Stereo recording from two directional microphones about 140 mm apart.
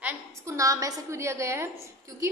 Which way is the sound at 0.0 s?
20° right (ahead or behind).